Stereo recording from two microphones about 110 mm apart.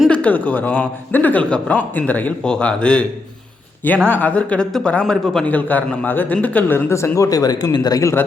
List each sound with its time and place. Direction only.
0.1 s a man's voice: 10° left (ahead or behind)
4.1 s a man's voice: 15° left (ahead or behind)
5.5 s a man's voice: 15° left (ahead or behind); by 8.1 s 35° left (ahead or behind)